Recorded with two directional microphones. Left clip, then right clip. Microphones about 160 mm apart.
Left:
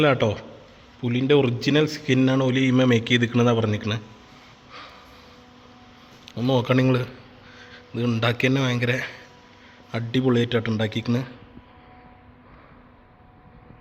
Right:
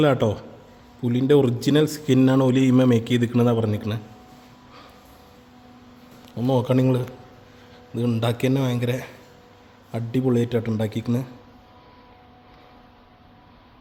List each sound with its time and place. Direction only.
0.0 s a man's voice: 30° right (ahead or behind)
6.2 s a man's voice: 15° right (ahead or behind)